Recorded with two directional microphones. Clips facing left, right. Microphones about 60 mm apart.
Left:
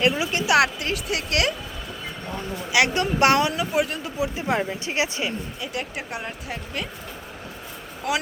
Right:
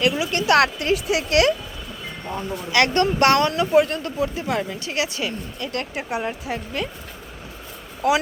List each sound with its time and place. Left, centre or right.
0.0 s speech: left
0.3 s speech: centre
2.7 s speech: centre
4.2 s speech: left
5.5 s speech: centre
8.0 s speech: centre